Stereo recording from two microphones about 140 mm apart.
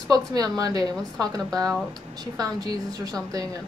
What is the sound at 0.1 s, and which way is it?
Speech, 25° right (ahead or behind).